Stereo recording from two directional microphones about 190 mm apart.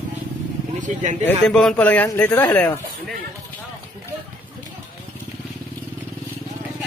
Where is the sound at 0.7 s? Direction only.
40° right (ahead or behind).